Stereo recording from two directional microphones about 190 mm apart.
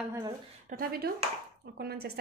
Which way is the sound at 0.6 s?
50° right (ahead or behind).